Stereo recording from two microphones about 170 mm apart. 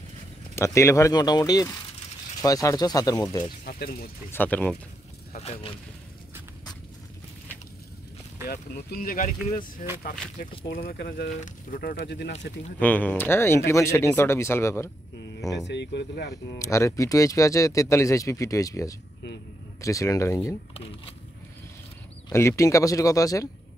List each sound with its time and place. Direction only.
0.6 s speech: 15° left (ahead or behind)
3.6 s speech: 65° left (ahead or behind)
4.3 s speech: 10° left (ahead or behind)
5.3 s speech: 35° left (ahead or behind)
8.5 s speech: 60° left (ahead or behind)
10.7 s speech: 60° left (ahead or behind)
11.2 s speech: 50° left (ahead or behind); by 12.3 s 70° left (ahead or behind)
12.7 s speech: 10° left (ahead or behind)
15.6 s speech: 90° left
16.5 s speech: 20° left (ahead or behind)
20.7 s speech: 35° left (ahead or behind)
22.3 s speech: 15° left (ahead or behind)